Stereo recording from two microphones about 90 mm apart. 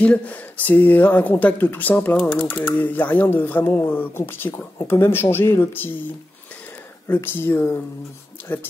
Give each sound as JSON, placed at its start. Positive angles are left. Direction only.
{"t": 0.0, "sound": "speech", "side_deg": 15}
{"t": 7.1, "sound": "speech", "side_deg": 25}